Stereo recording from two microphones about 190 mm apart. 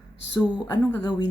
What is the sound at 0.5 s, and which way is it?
Speech, 20° left (ahead or behind).